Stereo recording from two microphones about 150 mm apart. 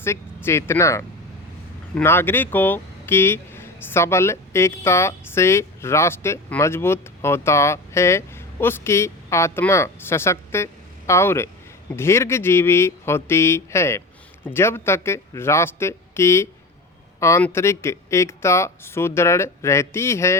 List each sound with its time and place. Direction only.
0.4 s speech: 15° left (ahead or behind)